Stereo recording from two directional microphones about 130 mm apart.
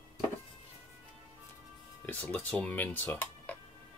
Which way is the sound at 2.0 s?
15° left (ahead or behind).